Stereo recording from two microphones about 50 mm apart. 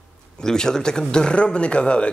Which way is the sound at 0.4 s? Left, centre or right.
Centre.